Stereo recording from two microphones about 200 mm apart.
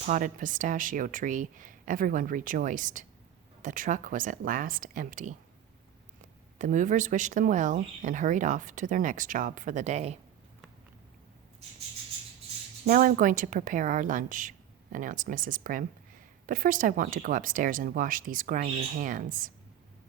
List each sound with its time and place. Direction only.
0.0 s speech: 40° right (ahead or behind)
6.6 s speech: 40° right (ahead or behind)
12.9 s speech: 45° right (ahead or behind)